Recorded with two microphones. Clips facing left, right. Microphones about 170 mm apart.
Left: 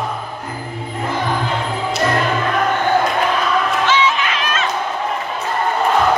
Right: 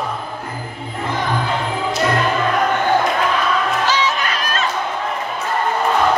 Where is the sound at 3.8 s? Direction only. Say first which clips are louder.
Left 2 dB; 40° right (ahead or behind).